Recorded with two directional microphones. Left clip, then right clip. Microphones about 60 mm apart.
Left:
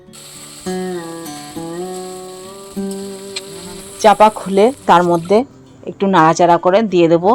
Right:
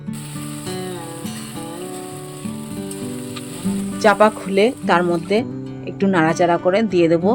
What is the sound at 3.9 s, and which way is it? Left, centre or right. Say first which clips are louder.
Speech: left 5 dB; centre.